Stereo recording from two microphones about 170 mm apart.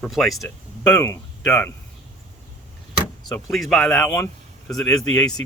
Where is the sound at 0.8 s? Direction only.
20° left (ahead or behind).